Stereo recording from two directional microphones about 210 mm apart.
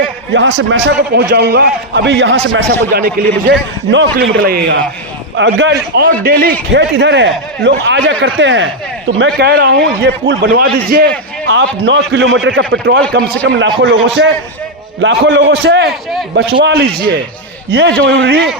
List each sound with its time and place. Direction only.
0.3 s a man's voice: 60° right (ahead or behind)
2.9 s a man's voice: 40° right (ahead or behind)
3.5 s a man's voice: 55° right (ahead or behind)
4.4 s a man's voice: 45° right (ahead or behind)
5.4 s a man's voice: 60° right (ahead or behind)
6.7 s a man's voice: 55° right (ahead or behind)
11.4 s a man's voice: 60° right (ahead or behind)
13.1 s a man's voice: 55° right (ahead or behind)
15.0 s a man's voice: 60° right (ahead or behind)